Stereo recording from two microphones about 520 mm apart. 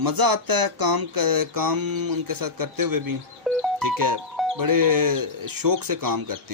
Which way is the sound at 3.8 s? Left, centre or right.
Right.